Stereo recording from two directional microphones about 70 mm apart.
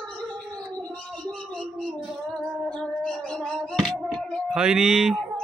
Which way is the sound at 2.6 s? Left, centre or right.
Centre.